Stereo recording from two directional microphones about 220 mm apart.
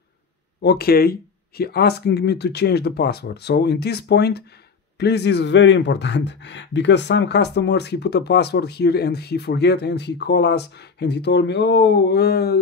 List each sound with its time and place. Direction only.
0.6 s speech: 45° left (ahead or behind)